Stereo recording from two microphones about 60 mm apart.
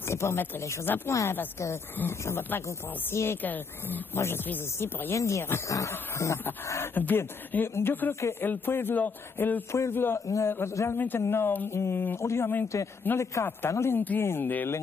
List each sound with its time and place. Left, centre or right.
0.1 s speech: left
0.8 s speech: left
2.2 s a man's voice: left
3.4 s speech: left
5.1 s speech: left
7.0 s a man's voice: left
9.7 s a man's voice: left
10.1 s speech: left
10.5 s a man's voice: left
12.2 s a man's voice: left
12.7 s a man's voice: left
13.9 s speech: left